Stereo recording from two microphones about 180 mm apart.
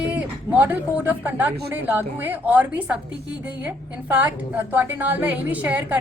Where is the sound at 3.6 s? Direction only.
10° right (ahead or behind).